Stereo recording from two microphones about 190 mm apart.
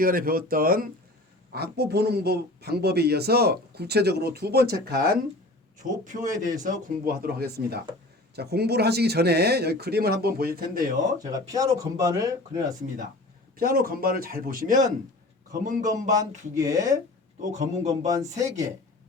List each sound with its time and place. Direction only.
0.0 s speech: 50° right (ahead or behind)
1.5 s speech: 60° right (ahead or behind)
5.8 s speech: 40° right (ahead or behind)
11.2 s speech: 20° right (ahead or behind)
13.6 s speech: 50° right (ahead or behind)
16.6 s speech: 20° right (ahead or behind)
17.4 s speech: 40° right (ahead or behind)
17.8 s speech: 20° right (ahead or behind)